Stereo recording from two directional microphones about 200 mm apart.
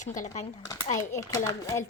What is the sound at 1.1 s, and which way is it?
Speech, 15° left (ahead or behind).